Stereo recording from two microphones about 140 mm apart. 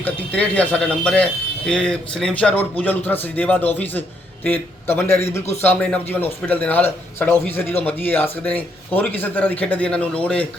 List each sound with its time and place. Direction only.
0.0 s a man's voice: 10° left (ahead or behind)